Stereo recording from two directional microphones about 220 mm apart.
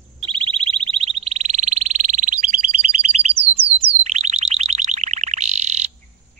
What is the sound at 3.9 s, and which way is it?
Chirp tone, 30° right (ahead or behind).